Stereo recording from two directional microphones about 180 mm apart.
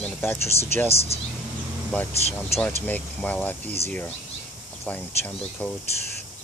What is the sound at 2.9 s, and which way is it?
Speech, 10° left (ahead or behind).